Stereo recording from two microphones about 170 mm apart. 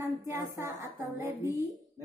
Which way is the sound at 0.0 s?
15° right (ahead or behind).